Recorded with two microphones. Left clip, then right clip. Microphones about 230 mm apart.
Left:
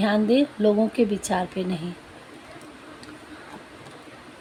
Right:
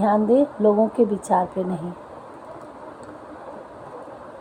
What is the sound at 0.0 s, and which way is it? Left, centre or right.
A woman's voice, left.